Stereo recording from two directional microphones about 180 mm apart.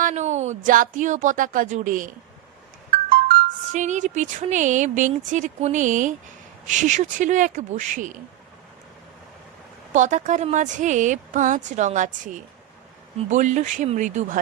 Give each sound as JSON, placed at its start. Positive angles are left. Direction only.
{"t": 0.0, "sound": "speech", "side_deg": -40}
{"t": 3.7, "sound": "a woman's voice", "side_deg": -40}
{"t": 9.9, "sound": "a woman's voice", "side_deg": -40}